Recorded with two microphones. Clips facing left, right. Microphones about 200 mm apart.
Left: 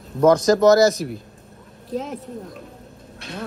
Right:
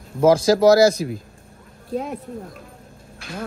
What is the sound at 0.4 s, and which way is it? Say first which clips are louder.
Speech: even; 30° right (ahead or behind).